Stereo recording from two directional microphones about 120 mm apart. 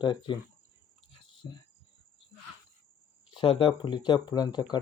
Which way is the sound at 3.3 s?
45° left (ahead or behind).